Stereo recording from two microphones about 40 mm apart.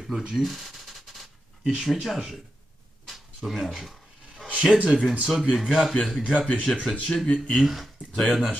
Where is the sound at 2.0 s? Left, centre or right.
Centre.